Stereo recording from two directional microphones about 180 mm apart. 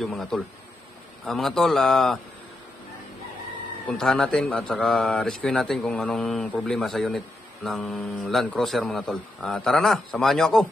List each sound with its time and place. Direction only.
0.0 s a man's voice: centre (ahead or behind)
3.8 s a man's voice: 5° left (ahead or behind)